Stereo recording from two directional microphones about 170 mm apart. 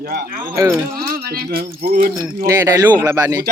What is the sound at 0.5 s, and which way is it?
Speech, 15° right (ahead or behind).